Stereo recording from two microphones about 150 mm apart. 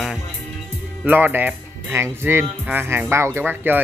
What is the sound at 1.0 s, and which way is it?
Speech, 15° right (ahead or behind).